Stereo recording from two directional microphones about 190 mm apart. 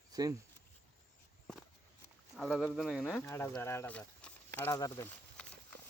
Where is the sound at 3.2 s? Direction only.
10° left (ahead or behind).